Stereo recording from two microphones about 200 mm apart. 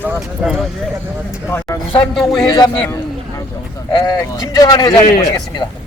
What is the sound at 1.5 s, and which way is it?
Speech, 10° left (ahead or behind).